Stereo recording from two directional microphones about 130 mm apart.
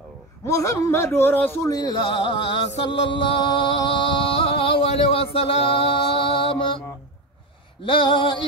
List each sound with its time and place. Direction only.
0.5 s speech: 25° left (ahead or behind)
3.1 s music: 40° left (ahead or behind)
7.8 s a sound: 40° left (ahead or behind)